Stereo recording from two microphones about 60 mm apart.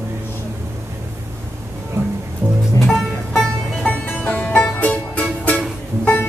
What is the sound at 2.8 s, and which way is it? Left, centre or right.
Music, centre.